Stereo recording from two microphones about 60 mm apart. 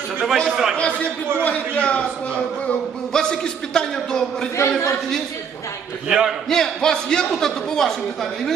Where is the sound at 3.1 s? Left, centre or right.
Centre.